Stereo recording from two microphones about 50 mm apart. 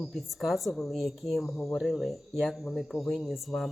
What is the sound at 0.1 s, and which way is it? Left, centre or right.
Speech, centre.